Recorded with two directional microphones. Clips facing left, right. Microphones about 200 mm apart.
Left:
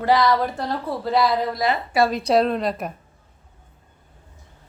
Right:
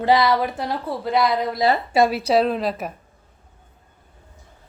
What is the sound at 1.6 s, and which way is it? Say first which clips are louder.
Speech: right 4 dB; 25° right (ahead or behind).